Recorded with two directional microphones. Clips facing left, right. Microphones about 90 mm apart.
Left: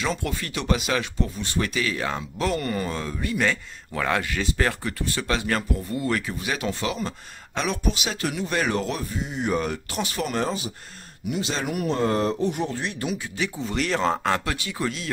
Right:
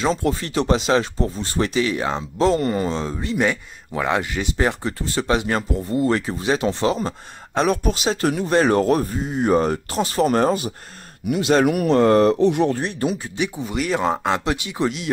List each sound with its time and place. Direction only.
0.0 s speech: 30° right (ahead or behind); by 12.7 s 85° right
12.7 s speech: 40° right (ahead or behind)
13.4 s speech: 15° right (ahead or behind)